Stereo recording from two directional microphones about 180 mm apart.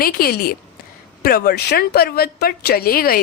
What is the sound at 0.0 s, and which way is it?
Speech, 55° left (ahead or behind).